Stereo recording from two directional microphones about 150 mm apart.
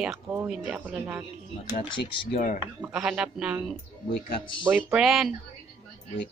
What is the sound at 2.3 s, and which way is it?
Speech, 55° left (ahead or behind).